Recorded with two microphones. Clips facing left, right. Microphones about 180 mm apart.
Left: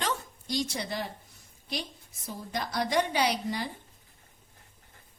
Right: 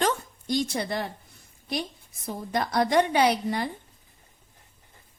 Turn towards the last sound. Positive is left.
turn(degrees=-55)  # may be behind; listen again after turning